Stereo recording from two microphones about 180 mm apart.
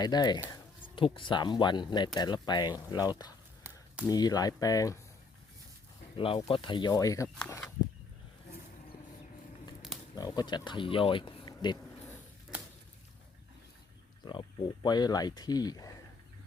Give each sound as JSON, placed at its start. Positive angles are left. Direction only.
{"t": 0.0, "sound": "speech", "side_deg": 25}
{"t": 4.1, "sound": "speech", "side_deg": 20}
{"t": 6.1, "sound": "speech", "side_deg": 30}
{"t": 10.2, "sound": "speech", "side_deg": 20}
{"t": 14.3, "sound": "speech", "side_deg": 25}